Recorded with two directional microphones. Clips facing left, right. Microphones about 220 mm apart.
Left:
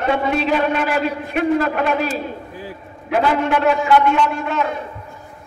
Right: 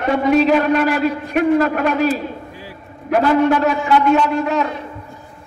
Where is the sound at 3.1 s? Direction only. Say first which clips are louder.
Right 4 dB; 45° right (ahead or behind).